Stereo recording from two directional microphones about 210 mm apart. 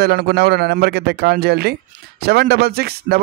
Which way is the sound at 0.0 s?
50° right (ahead or behind).